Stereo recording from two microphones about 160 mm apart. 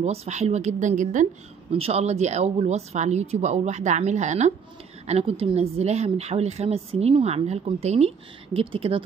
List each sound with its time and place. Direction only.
0.0 s speech: 40° right (ahead or behind)
1.7 s a woman's voice: 40° right (ahead or behind)